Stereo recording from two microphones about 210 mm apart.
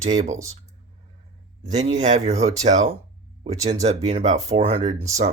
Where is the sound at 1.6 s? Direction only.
35° right (ahead or behind).